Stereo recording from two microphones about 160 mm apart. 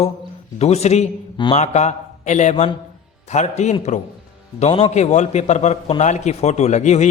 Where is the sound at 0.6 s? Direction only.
40° left (ahead or behind).